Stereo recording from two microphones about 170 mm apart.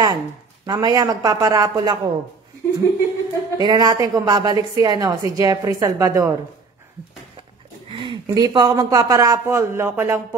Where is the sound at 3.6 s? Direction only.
25° right (ahead or behind).